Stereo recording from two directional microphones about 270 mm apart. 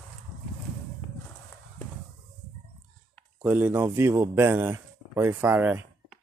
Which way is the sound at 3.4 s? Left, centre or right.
Centre.